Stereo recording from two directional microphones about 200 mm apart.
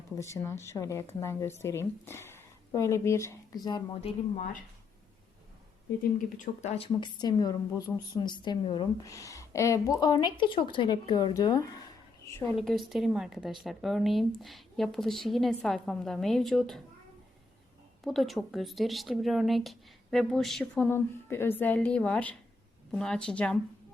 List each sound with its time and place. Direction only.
0.2 s a woman's voice: 15° left (ahead or behind)
6.1 s a woman's voice: 35° left (ahead or behind); by 12.5 s 10° left (ahead or behind)
12.5 s speech: centre (ahead or behind)
18.0 s speech: centre (ahead or behind)